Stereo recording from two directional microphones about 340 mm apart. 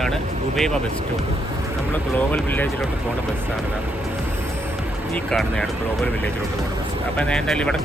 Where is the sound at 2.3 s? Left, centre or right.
Centre.